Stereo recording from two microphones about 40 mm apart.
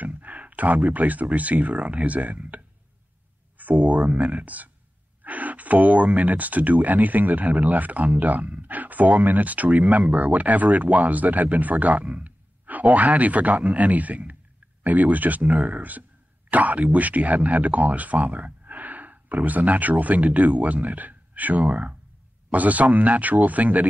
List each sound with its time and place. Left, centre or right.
0.0 s speech: right
3.7 s speech: right